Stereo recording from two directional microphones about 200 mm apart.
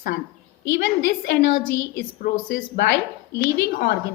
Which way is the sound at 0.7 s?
55° left (ahead or behind).